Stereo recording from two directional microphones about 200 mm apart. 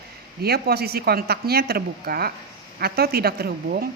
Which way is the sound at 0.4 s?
50° right (ahead or behind).